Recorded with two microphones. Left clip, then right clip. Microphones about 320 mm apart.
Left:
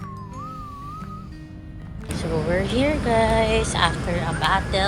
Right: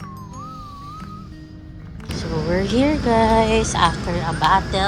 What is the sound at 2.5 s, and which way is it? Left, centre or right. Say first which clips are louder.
Speech: right 3 dB; centre.